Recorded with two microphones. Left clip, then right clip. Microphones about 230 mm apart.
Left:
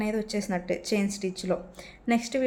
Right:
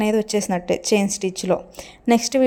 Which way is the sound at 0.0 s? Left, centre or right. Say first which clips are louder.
Right 10 dB; right.